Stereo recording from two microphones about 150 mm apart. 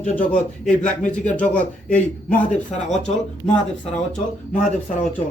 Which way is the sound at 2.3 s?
55° left (ahead or behind).